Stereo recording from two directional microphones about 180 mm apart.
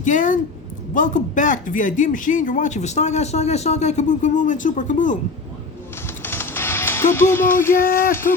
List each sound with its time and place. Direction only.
0.0 s speech: 45° left (ahead or behind)
6.2 s music: 10° left (ahead or behind)
8.1 s speech: 15° left (ahead or behind)